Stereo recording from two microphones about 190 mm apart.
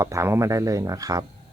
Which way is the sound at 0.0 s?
15° right (ahead or behind).